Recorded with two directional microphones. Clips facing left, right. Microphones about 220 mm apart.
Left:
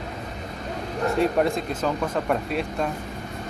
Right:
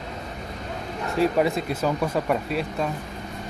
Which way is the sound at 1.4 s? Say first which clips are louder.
Even; 5° right (ahead or behind).